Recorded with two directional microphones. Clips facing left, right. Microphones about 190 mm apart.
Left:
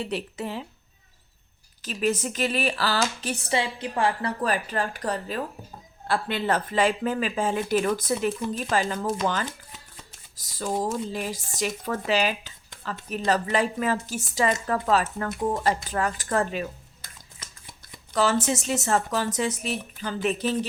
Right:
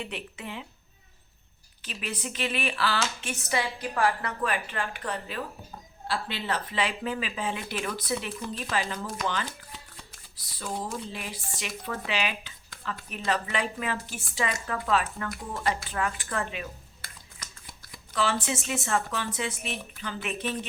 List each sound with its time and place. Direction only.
0.0 s a woman's voice: 35° left (ahead or behind)
1.8 s a woman's voice: 40° left (ahead or behind)
3.6 s a woman's voice: 25° left (ahead or behind); by 5.4 s 40° left (ahead or behind)
6.1 s a woman's voice: 50° left (ahead or behind)
18.1 s a woman's voice: 40° left (ahead or behind)